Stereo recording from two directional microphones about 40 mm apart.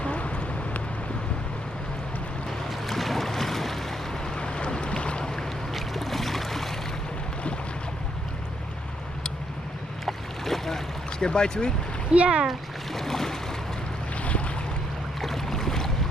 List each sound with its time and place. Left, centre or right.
0.0 s vehicle: left
2.5 s boat: centre
4.4 s boat: left
5.7 s boat: centre
10.1 s boat: centre
11.2 s speech: centre
12.1 s speech: right
12.5 s a sound: centre
14.2 s boat: left
15.2 s boat: centre